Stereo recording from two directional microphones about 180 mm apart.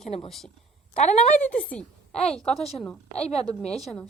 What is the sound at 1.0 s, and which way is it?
Speech, 40° left (ahead or behind).